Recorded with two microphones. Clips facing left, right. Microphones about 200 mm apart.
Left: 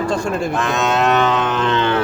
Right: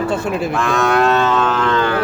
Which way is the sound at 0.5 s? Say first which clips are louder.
Right 5 dB; 20° left (ahead or behind).